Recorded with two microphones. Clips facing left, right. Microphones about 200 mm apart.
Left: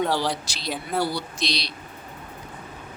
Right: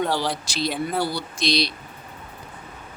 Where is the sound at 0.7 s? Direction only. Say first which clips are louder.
Left 1 dB; centre (ahead or behind).